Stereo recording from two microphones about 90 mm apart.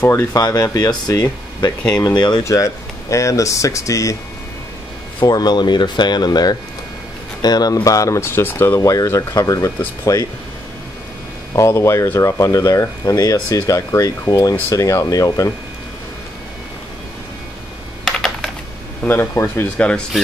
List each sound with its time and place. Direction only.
0.3 s speech: 40° left (ahead or behind)
2.4 s speech: 35° left (ahead or behind)
5.2 s speech: 50° left (ahead or behind); by 8.7 s 25° left (ahead or behind)
8.7 s speech: 40° left (ahead or behind)
11.5 s speech: 35° left (ahead or behind)
18.0 s computer keyboard: 5° left (ahead or behind)
19.0 s speech: 25° left (ahead or behind)